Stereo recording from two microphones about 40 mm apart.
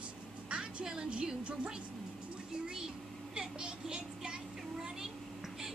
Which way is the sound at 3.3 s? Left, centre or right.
Right.